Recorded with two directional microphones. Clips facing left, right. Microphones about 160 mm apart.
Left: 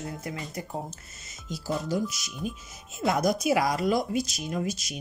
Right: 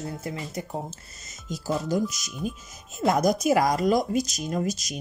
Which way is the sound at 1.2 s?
45° right (ahead or behind).